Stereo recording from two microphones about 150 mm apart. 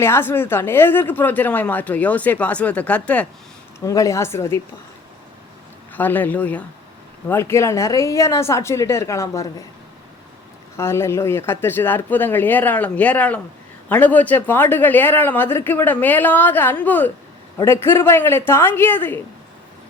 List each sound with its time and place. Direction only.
0.0 s speech: 15° left (ahead or behind)
3.8 s a woman's voice: 20° left (ahead or behind)
5.9 s a woman's voice: 10° left (ahead or behind)
10.8 s speech: 15° left (ahead or behind)